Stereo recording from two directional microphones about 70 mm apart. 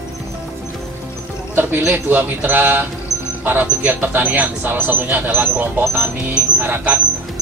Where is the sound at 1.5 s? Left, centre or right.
Right.